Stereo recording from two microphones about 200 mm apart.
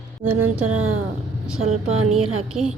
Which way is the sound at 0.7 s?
90° right.